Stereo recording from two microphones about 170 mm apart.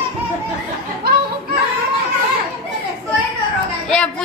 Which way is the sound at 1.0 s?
65° right (ahead or behind).